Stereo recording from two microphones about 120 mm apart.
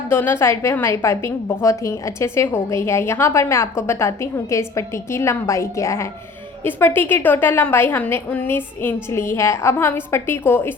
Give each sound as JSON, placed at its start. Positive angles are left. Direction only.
{"t": 0.1, "sound": "a woman's voice", "side_deg": 20}